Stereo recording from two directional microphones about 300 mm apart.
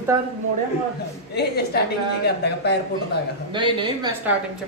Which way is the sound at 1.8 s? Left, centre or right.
Left.